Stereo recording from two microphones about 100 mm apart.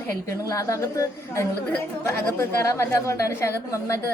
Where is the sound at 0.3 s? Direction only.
35° left (ahead or behind).